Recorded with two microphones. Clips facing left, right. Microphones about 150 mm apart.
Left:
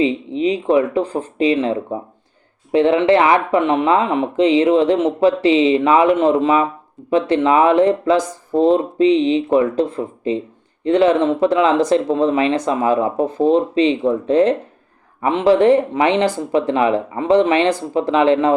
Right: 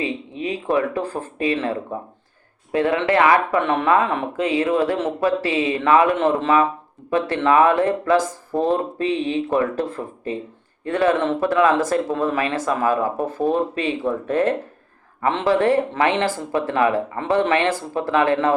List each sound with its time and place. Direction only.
0.0 s speech: 20° left (ahead or behind)